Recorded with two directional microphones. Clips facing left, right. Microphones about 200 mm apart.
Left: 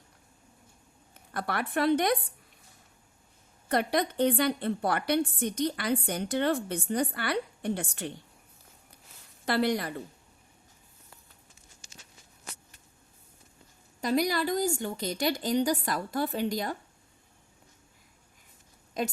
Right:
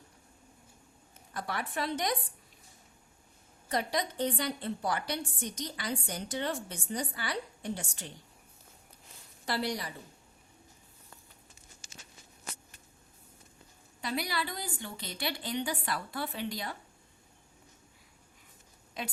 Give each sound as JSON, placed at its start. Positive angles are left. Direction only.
{"t": 1.3, "sound": "a woman's voice", "side_deg": 65}
{"t": 3.7, "sound": "a woman's voice", "side_deg": 60}
{"t": 9.5, "sound": "a woman's voice", "side_deg": 55}
{"t": 14.0, "sound": "a woman's voice", "side_deg": 45}
{"t": 19.0, "sound": "a woman's voice", "side_deg": 45}